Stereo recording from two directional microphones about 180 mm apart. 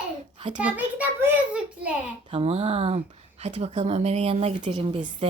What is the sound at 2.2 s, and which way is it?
Speech, 35° right (ahead or behind).